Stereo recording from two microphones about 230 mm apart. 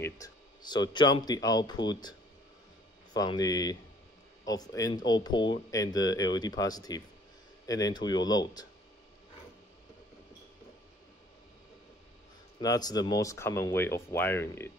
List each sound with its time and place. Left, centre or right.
0.0 s speech: centre
12.5 s speech: centre